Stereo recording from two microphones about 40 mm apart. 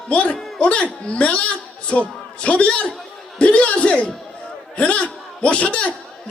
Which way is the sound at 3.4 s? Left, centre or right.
Left.